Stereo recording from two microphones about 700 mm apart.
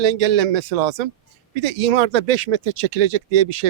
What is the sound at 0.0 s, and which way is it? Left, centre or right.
Speech, right.